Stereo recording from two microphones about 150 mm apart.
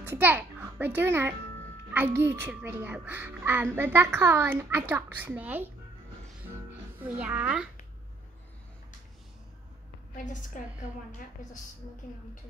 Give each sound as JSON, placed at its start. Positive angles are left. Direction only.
{"t": 0.0, "sound": "a child's voice", "side_deg": -10}
{"t": 7.0, "sound": "a woman's voice", "side_deg": -10}
{"t": 10.6, "sound": "a woman's voice", "side_deg": 60}